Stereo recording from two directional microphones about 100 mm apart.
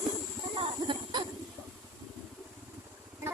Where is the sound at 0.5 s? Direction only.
55° right (ahead or behind).